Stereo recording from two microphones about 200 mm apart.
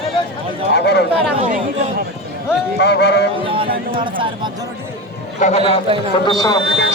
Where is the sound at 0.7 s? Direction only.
55° left (ahead or behind).